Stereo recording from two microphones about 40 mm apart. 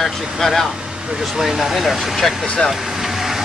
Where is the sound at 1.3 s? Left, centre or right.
Centre.